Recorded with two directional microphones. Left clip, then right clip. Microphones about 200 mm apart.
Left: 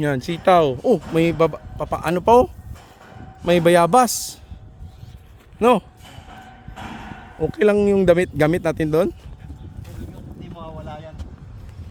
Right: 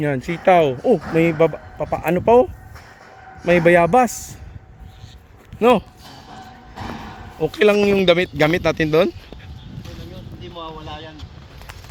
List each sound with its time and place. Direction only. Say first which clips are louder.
0.3 s speech: right 1 dB; 25° left (ahead or behind)
5.5 s speech: right 1 dB; 10° left (ahead or behind)
7.3 s speech: right 2 dB; 30° left (ahead or behind)